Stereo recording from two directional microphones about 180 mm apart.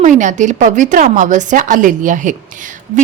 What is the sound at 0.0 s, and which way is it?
A woman's voice, 45° right (ahead or behind).